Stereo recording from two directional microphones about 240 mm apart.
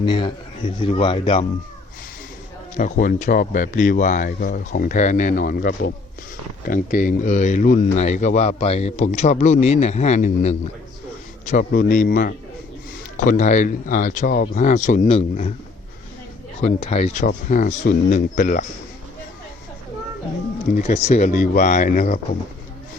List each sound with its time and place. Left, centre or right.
0.0 s speech: centre
2.7 s speech: left
16.6 s speech: left
20.7 s speech: left